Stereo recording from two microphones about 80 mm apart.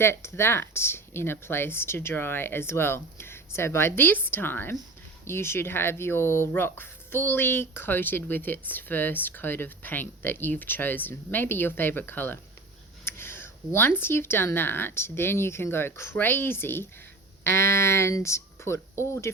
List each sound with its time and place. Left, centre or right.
0.0 s speech: left
13.1 s a sound: left
13.7 s speech: left